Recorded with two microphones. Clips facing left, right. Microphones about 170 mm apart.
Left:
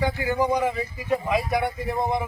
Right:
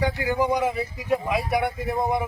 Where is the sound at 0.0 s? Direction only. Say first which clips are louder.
Even; 15° right (ahead or behind).